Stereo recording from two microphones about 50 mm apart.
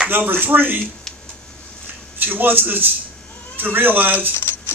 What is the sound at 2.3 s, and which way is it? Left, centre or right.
A man's voice, right.